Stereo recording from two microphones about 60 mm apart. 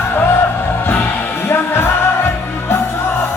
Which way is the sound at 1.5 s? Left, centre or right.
Left.